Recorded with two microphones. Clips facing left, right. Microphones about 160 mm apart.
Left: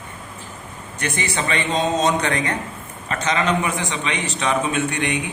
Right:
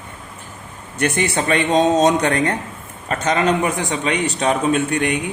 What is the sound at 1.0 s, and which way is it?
A man's voice, 50° right (ahead or behind).